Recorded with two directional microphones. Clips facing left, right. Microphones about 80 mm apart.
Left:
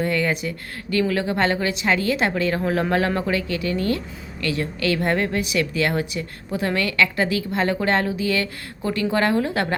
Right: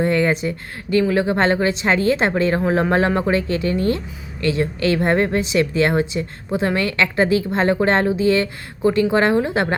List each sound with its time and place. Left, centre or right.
0.0 s a woman's voice: right